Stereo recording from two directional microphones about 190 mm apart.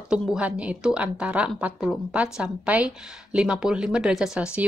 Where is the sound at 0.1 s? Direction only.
5° right (ahead or behind).